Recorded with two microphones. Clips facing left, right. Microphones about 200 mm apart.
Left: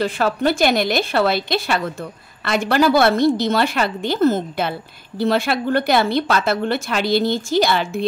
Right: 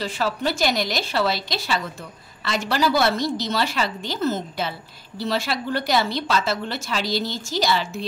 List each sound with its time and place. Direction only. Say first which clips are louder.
0.0 s speech: left 6 dB; 55° left (ahead or behind)